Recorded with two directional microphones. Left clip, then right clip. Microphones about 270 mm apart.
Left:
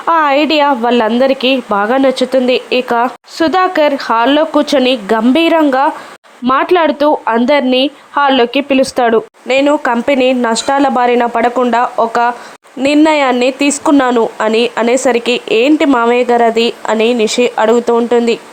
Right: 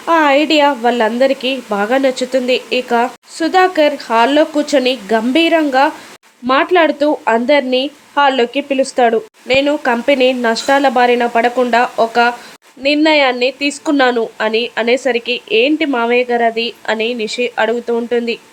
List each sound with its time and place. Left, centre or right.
0.0 s speech: centre